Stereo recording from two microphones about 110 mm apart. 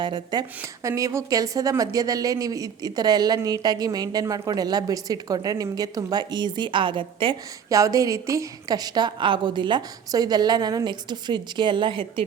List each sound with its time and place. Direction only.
0.0 s a woman's voice: 45° right (ahead or behind)
0.6 s a woman's voice: 30° right (ahead or behind); by 7.3 s 50° right (ahead or behind)
7.7 s a woman's voice: 30° right (ahead or behind); by 12.2 s 50° right (ahead or behind)